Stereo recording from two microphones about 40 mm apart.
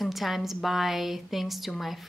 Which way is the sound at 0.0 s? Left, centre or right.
Centre.